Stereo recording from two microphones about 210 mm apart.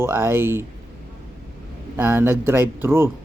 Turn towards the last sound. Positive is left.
turn(degrees=-10)  # may be behind; listen again after turning